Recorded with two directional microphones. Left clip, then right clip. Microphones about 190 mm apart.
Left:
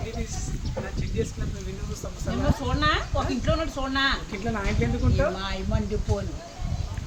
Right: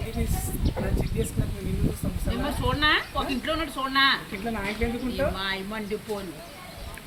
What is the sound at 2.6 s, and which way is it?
A woman's voice, 60° left (ahead or behind).